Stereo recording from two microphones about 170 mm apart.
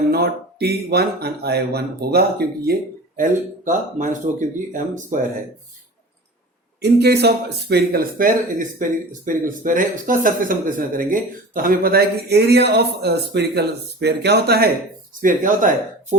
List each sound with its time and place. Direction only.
0.1 s speech: 70° right (ahead or behind)
3.2 s speech: 50° right (ahead or behind)
6.8 s speech: 70° right (ahead or behind)
15.2 s speech: 50° right (ahead or behind)